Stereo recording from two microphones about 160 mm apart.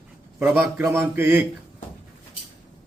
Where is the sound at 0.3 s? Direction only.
10° right (ahead or behind).